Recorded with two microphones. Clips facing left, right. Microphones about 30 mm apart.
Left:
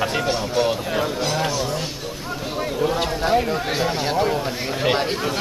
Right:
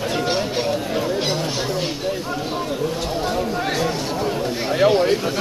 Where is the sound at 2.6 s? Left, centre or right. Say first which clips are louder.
Left 6 dB; left.